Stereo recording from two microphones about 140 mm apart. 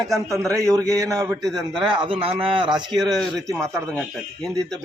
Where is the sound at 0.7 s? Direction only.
25° right (ahead or behind).